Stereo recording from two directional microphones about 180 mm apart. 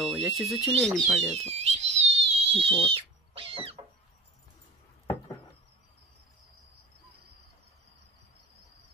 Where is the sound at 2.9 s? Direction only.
30° right (ahead or behind).